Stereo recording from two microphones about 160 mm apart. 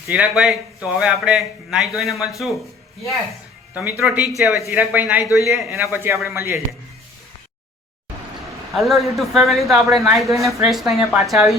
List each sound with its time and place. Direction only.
0.1 s a man's voice: 5° right (ahead or behind)
3.8 s a man's voice: 5° right (ahead or behind)
4.6 s speech: 10° right (ahead or behind)
8.7 s a man's voice: centre (ahead or behind)
10.2 s speech: 20° right (ahead or behind)
10.6 s a man's voice: centre (ahead or behind)